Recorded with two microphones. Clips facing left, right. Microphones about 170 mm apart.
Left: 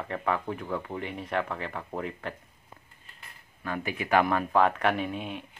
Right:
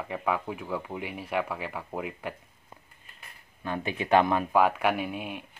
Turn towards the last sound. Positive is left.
turn(degrees=-10)  # may be behind; listen again after turning